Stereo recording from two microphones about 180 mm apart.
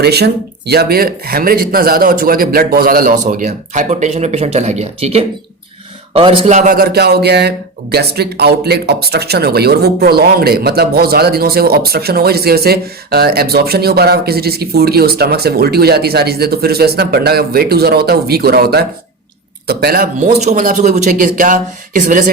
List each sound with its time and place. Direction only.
0.0 s a man's voice: 65° right (ahead or behind); by 22.2 s 45° right (ahead or behind)